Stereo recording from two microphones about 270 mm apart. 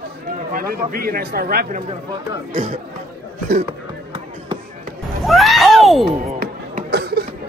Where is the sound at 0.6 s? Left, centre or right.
Right.